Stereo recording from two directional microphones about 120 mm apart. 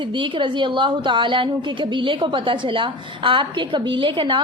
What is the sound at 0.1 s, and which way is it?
A woman's voice, 40° right (ahead or behind).